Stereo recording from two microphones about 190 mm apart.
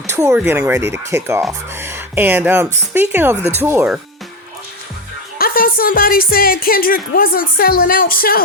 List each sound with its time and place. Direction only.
0.1 s speech: 15° right (ahead or behind)
5.4 s speech: 50° left (ahead or behind)